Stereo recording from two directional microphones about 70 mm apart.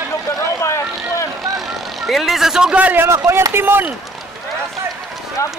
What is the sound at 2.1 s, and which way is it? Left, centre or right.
Speech, centre.